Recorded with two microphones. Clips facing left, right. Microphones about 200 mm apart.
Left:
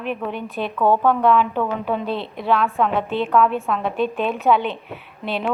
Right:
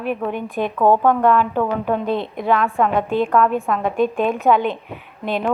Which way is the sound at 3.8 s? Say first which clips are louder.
Right 5 dB; 45° right (ahead or behind).